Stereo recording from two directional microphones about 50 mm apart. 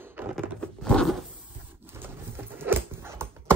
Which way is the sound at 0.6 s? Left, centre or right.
Centre.